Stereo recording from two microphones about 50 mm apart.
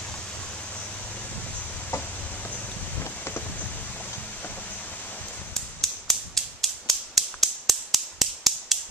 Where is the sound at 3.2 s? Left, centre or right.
Left.